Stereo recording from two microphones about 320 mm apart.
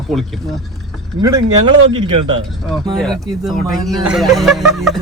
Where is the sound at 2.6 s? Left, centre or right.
Centre.